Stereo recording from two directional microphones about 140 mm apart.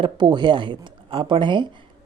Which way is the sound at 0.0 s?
30° right (ahead or behind).